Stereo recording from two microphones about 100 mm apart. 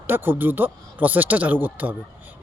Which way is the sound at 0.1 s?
20° right (ahead or behind).